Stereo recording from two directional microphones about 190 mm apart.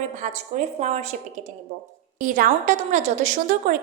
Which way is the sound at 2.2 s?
45° right (ahead or behind).